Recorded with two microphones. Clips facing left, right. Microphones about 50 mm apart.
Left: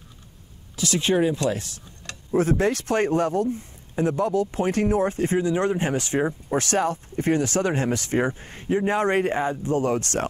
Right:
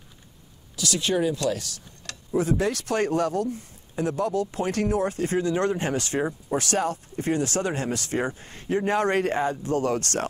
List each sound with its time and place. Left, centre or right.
0.7 s speech: left
2.3 s speech: left
6.5 s speech: left